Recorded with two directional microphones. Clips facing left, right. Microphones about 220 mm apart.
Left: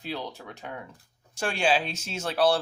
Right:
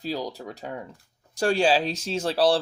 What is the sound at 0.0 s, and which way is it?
Speech, 40° right (ahead or behind).